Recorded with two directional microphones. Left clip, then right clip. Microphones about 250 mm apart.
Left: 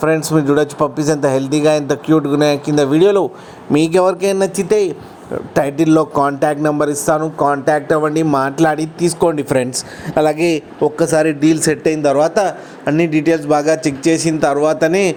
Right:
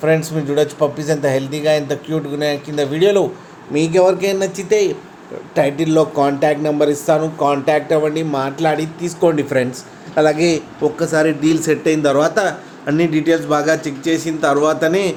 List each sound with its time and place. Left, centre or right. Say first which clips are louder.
0.0 s a man's voice: left 2 dB; left